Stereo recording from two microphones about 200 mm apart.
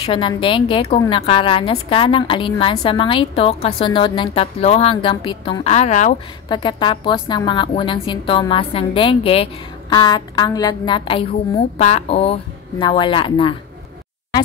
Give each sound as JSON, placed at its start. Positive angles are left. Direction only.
{"t": 0.0, "sound": "a woman's voice", "side_deg": 25}
{"t": 6.5, "sound": "a woman's voice", "side_deg": 25}